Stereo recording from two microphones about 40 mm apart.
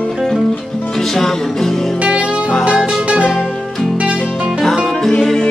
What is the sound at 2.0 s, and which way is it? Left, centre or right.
Music, right.